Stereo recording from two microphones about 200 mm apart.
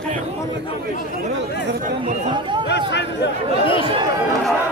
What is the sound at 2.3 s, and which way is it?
Chatter, 25° right (ahead or behind).